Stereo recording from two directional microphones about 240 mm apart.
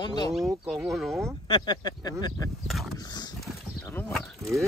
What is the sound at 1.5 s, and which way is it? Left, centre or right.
Speech, centre.